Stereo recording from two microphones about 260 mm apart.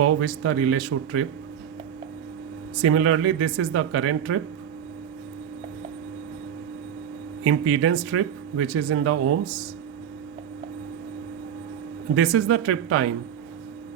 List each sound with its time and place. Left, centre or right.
0.0 s speech: right
2.8 s speech: right
7.4 s speech: right
12.1 s speech: right